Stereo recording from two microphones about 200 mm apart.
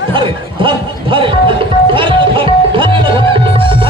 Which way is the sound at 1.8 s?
25° right (ahead or behind).